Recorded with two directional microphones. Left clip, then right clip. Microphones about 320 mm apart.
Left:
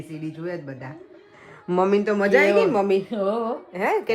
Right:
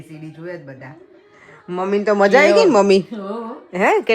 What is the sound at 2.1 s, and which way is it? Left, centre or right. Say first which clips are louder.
A woman's voice: right 7 dB; right.